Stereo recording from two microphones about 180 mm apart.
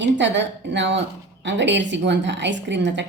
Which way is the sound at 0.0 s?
80° right.